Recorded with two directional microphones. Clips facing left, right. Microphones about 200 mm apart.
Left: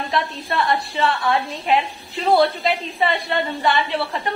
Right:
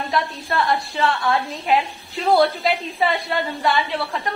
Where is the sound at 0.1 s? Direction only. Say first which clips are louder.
Even; centre (ahead or behind).